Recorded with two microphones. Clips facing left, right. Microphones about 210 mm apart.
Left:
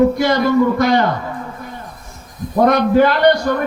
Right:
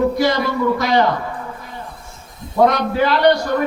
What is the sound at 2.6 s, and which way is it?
Speech, 50° left (ahead or behind).